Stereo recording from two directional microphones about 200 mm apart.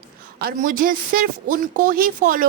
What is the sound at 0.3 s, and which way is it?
A woman's voice, 45° right (ahead or behind).